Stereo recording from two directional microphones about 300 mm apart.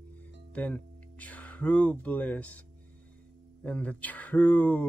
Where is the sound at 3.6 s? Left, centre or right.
Centre.